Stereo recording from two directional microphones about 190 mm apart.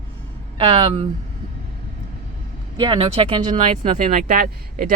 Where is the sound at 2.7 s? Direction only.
25° right (ahead or behind).